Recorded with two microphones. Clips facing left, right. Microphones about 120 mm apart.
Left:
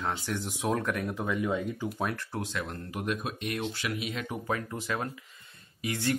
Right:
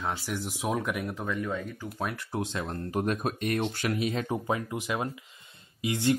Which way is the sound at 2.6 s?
40° right (ahead or behind).